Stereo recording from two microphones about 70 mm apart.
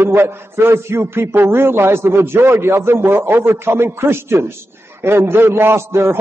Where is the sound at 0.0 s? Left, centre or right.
Right.